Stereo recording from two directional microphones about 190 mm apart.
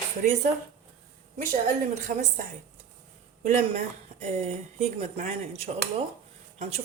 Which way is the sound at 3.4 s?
40° right (ahead or behind).